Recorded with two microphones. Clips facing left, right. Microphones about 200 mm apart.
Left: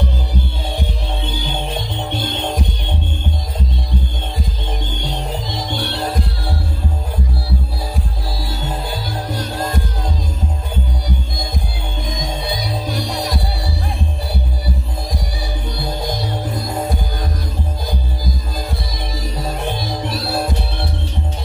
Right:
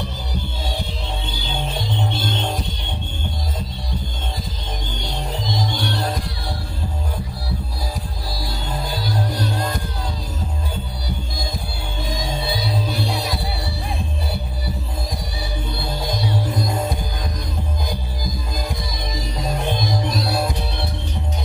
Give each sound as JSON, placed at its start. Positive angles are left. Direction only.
{"t": 20.1, "sound": "music", "side_deg": -15}